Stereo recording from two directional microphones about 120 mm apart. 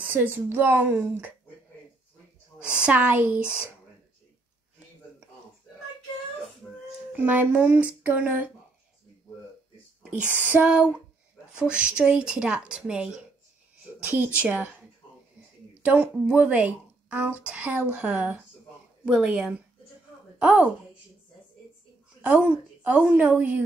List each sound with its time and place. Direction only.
0.0 s speech: 15° right (ahead or behind)
2.7 s speech: 10° right (ahead or behind)
7.1 s speech: 15° right (ahead or behind)
10.0 s speech: 10° right (ahead or behind)
22.5 s speech: 15° right (ahead or behind)